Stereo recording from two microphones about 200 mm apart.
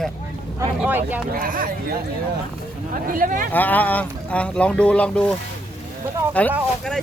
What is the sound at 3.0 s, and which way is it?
Speech, 45° right (ahead or behind).